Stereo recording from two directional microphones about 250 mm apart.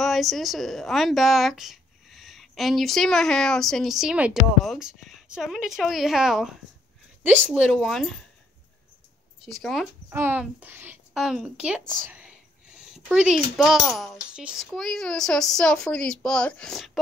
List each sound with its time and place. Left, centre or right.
0.0 s a woman's voice: centre
9.5 s a woman's voice: centre
12.0 s whispering: centre
13.1 s a woman's voice: centre